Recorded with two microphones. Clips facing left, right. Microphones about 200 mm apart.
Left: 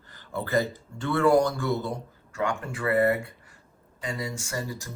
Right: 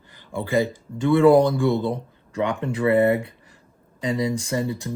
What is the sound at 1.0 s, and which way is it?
Speech, 20° right (ahead or behind).